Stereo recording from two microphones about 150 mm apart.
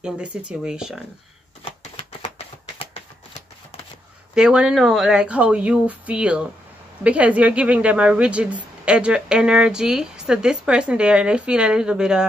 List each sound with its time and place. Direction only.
0.0 s a woman's voice: 5° right (ahead or behind)
1.6 s shuffling cards: 45° left (ahead or behind)
4.4 s a woman's voice: 5° right (ahead or behind)